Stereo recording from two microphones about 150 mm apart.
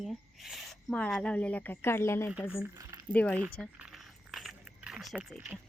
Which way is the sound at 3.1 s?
10° left (ahead or behind).